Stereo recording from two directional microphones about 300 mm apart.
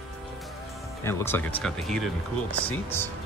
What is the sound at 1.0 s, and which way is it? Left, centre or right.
Speech, centre.